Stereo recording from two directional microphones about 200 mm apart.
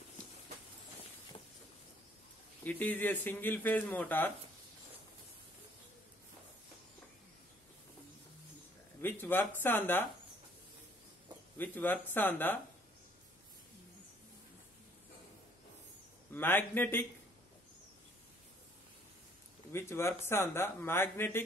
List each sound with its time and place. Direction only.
2.6 s speech: 10° left (ahead or behind)
9.0 s speech: 10° left (ahead or behind)
11.5 s speech: 10° left (ahead or behind)
16.3 s speech: 10° left (ahead or behind)
19.7 s speech: 15° left (ahead or behind)